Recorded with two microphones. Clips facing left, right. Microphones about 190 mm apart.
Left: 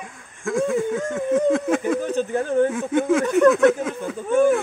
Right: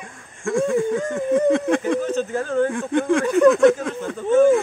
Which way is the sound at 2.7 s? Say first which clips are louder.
Even; 5° left (ahead or behind).